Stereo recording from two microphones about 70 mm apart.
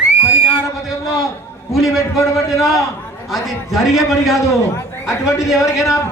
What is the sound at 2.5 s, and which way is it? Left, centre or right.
A man's voice, centre.